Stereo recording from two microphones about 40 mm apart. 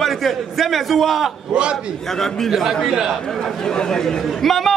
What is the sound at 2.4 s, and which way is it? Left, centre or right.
Speech, centre.